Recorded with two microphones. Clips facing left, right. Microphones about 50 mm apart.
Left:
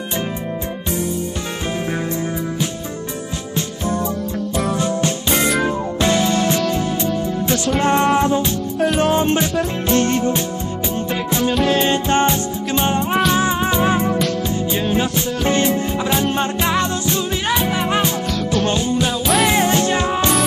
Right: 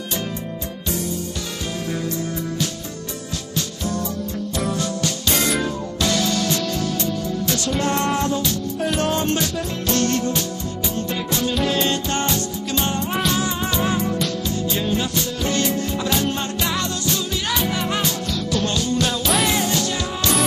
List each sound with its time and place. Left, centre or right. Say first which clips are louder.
4.7 s music: left 5 dB; left
11.5 s music: left 5 dB; centre
11.8 s music: left 6 dB; left
19.5 s music: left 6 dB; left